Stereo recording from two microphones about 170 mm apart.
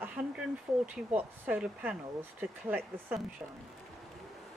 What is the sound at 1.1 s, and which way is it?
Speech, 10° right (ahead or behind).